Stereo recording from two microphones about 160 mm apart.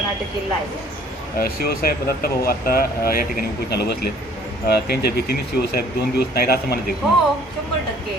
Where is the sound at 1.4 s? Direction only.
75° left (ahead or behind).